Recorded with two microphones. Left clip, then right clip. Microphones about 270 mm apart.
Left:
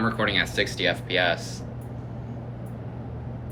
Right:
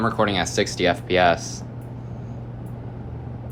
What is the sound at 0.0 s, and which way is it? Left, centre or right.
Speech, centre.